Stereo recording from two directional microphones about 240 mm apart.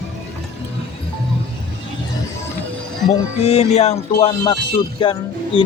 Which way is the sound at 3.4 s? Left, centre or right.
Left.